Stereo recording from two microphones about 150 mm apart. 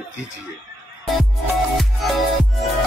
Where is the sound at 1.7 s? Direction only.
Centre (ahead or behind).